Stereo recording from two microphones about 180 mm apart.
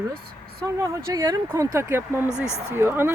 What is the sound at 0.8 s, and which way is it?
Speech, 20° right (ahead or behind).